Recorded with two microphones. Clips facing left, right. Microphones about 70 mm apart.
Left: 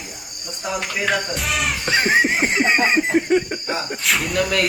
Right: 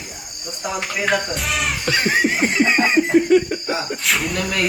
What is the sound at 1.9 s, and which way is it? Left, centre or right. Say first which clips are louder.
Laughter: left 1 dB; left.